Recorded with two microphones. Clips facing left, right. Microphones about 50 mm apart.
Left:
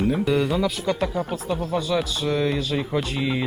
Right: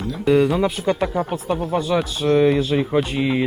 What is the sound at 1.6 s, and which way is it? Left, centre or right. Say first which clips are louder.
Speech: right 3 dB; right.